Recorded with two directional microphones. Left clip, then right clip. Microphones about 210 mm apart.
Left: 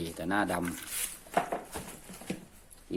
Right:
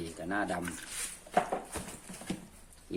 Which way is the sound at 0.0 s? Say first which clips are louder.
Left 4 dB; 45° left (ahead or behind).